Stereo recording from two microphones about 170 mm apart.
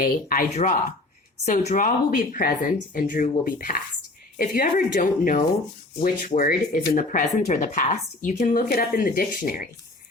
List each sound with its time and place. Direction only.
0.0 s a woman's voice: 55° left (ahead or behind)